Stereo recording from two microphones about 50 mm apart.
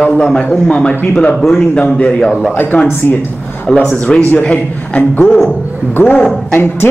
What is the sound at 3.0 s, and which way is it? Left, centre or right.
Speech, left.